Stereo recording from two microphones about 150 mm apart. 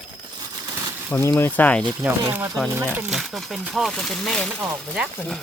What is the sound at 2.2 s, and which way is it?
Speech, 15° right (ahead or behind).